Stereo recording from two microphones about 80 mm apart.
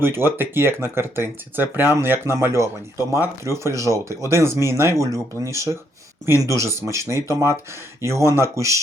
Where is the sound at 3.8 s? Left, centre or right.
Right.